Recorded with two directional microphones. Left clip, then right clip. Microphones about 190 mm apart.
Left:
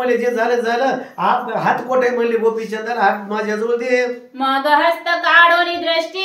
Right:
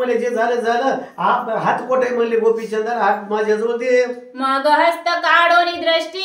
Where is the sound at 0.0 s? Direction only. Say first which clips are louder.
Left 1 dB; 15° left (ahead or behind).